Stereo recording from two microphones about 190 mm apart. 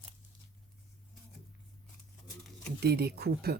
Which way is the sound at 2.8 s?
55° right (ahead or behind).